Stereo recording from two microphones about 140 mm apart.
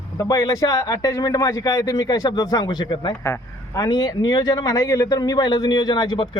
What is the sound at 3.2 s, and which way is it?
Speech, 20° left (ahead or behind).